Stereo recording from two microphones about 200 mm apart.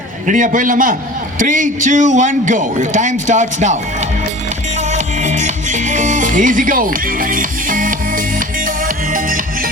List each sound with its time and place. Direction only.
0.3 s a man's voice: 40° right (ahead or behind)
4.9 s music: 35° right (ahead or behind)